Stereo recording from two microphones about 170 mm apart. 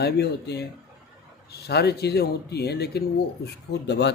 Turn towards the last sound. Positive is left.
turn(degrees=85)